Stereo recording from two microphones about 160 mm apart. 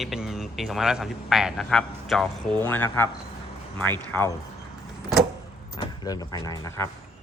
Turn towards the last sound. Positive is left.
turn(degrees=20)  # may be behind; listen again after turning